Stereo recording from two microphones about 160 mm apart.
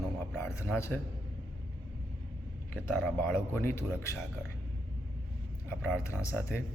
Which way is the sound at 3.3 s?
15° left (ahead or behind).